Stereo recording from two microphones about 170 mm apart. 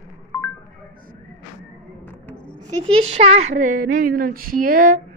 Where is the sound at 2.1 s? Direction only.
10° left (ahead or behind).